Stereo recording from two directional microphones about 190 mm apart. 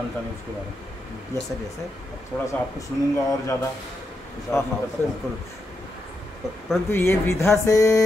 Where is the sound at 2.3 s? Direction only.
5° left (ahead or behind).